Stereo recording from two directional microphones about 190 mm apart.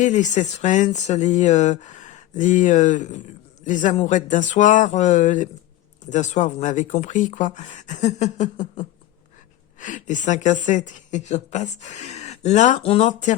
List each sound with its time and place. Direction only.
0.0 s a woman's voice: 40° left (ahead or behind)